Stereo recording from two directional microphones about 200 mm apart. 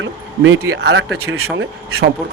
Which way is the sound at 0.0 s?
75° right (ahead or behind).